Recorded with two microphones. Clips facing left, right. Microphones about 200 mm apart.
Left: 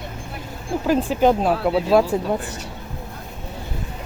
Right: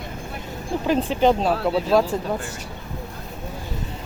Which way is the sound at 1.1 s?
10° left (ahead or behind).